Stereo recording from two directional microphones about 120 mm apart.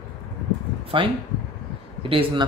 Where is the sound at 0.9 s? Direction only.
45° right (ahead or behind).